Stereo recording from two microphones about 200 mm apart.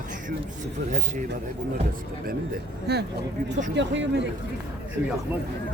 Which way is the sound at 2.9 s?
55° right (ahead or behind).